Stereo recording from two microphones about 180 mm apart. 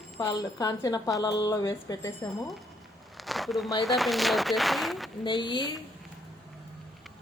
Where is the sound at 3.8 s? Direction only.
Centre (ahead or behind).